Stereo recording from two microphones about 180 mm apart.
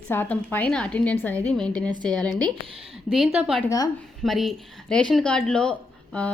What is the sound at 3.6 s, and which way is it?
Speech, 15° left (ahead or behind).